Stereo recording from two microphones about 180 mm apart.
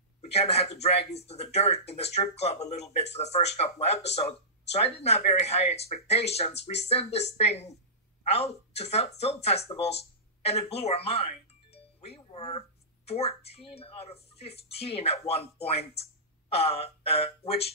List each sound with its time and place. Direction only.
0.2 s speech: 35° left (ahead or behind)